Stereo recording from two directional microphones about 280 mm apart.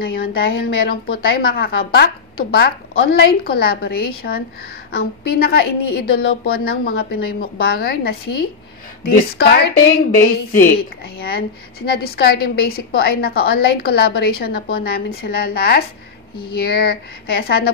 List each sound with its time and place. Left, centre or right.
0.0 s a woman's voice: left